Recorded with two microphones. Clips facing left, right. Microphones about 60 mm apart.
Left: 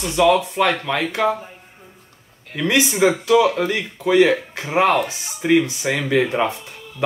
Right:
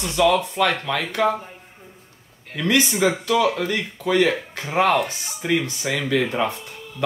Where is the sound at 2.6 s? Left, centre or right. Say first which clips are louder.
Left 2 dB; centre.